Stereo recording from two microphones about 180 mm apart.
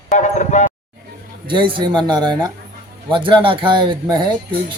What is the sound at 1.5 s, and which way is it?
Speech, 25° right (ahead or behind).